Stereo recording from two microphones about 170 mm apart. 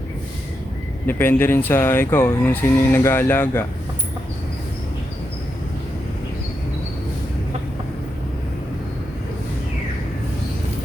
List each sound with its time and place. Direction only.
1.0 s speech: 10° left (ahead or behind)